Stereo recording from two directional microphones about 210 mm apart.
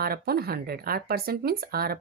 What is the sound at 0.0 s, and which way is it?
A woman's voice, 45° right (ahead or behind).